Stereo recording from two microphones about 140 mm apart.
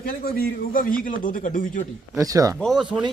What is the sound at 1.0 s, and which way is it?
Speech, 75° left (ahead or behind).